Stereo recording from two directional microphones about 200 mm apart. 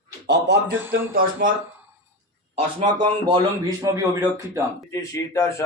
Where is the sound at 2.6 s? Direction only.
25° right (ahead or behind).